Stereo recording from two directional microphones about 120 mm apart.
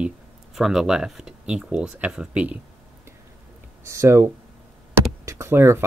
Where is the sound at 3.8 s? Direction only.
25° right (ahead or behind).